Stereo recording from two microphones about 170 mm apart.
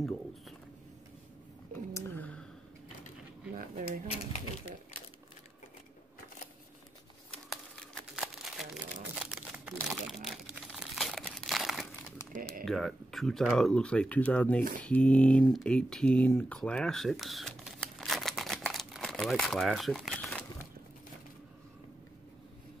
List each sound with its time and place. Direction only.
2.0 s clicking: 10° left (ahead or behind)
3.5 s drawer open or close: 55° right (ahead or behind)
7.4 s crumpling: centre (ahead or behind)
12.6 s speech: centre (ahead or behind)